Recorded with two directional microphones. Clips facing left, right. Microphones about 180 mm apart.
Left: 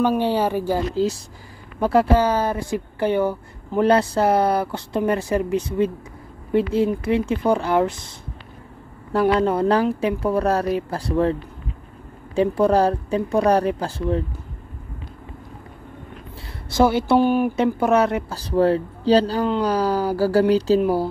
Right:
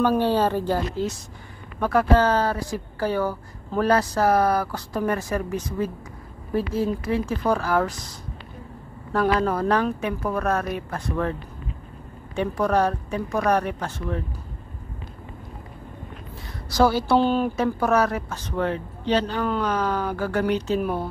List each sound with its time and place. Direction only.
0.0 s speech: 15° left (ahead or behind)
0.9 s a woman's voice: 30° left (ahead or behind)
2.1 s a woman's voice: 10° left (ahead or behind)
9.1 s a woman's voice: 25° left (ahead or behind)
12.4 s speech: 30° left (ahead or behind)
16.7 s a woman's voice: 20° left (ahead or behind)
17.7 s speech: 25° left (ahead or behind)